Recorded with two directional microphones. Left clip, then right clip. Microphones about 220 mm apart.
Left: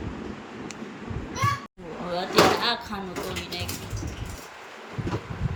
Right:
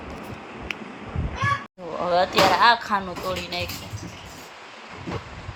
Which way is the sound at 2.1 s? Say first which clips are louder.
Right 3 dB; 15° right (ahead or behind).